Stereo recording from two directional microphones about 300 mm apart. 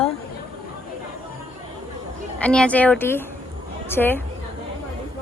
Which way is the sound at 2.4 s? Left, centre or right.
Centre.